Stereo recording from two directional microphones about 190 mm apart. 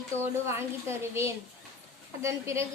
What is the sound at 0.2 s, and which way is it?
A woman's voice, 15° right (ahead or behind).